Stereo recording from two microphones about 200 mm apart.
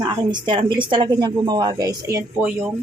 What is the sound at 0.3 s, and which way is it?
A woman's voice, 25° right (ahead or behind).